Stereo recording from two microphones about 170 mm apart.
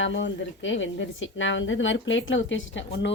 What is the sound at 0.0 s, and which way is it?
Speech, 90° left.